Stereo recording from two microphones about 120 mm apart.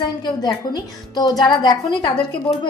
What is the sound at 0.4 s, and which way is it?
A woman's voice, 35° left (ahead or behind).